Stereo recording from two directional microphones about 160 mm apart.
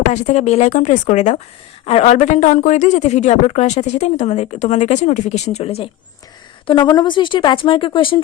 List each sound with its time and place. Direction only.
0.1 s speech: 45° left (ahead or behind)
6.7 s a woman's voice: 30° left (ahead or behind)